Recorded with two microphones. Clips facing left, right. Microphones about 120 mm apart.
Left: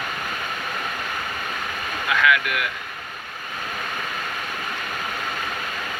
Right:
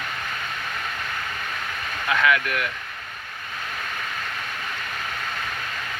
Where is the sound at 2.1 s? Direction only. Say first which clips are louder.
Left 1 dB; 30° right (ahead or behind).